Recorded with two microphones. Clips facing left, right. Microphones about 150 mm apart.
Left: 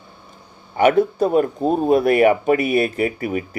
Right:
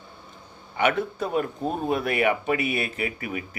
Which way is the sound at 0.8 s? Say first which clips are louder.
Left 9 dB; 40° left (ahead or behind).